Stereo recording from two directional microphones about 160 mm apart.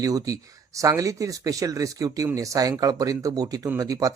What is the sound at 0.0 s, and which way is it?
Speech, 20° right (ahead or behind).